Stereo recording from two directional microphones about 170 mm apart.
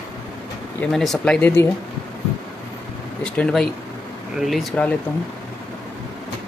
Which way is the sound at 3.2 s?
5° left (ahead or behind).